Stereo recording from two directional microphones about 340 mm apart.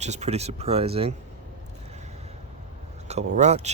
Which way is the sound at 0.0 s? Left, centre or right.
Centre.